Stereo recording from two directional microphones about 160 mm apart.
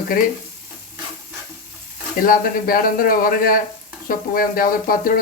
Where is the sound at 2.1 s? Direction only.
60° left (ahead or behind).